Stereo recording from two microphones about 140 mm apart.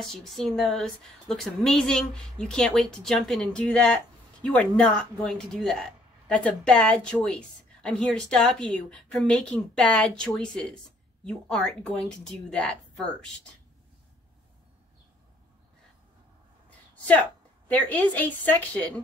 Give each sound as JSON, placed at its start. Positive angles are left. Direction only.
{"t": 0.0, "sound": "speech", "side_deg": 5}
{"t": 17.6, "sound": "a woman's voice", "side_deg": 10}